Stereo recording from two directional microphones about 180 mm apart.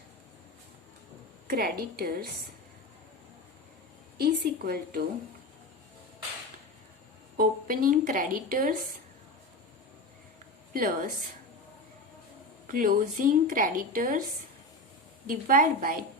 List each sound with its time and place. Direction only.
1.5 s a woman's voice: 55° right (ahead or behind)
4.2 s a woman's voice: 55° right (ahead or behind)
7.3 s a woman's voice: 50° right (ahead or behind)
10.8 s a woman's voice: 50° right (ahead or behind)
12.6 s a woman's voice: 50° right (ahead or behind)
15.3 s a woman's voice: 50° right (ahead or behind)